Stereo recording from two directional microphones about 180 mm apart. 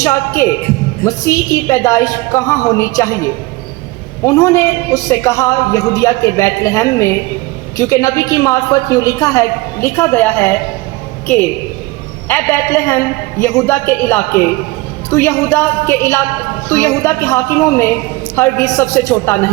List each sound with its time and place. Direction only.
0.0 s speech: 15° left (ahead or behind)
4.3 s speech: 15° left (ahead or behind)
12.3 s speech: 15° left (ahead or behind)